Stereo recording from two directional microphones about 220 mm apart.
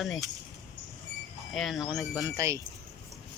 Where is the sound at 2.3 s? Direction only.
15° right (ahead or behind).